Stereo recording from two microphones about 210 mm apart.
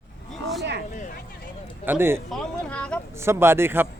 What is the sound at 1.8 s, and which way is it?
Speech, 10° right (ahead or behind).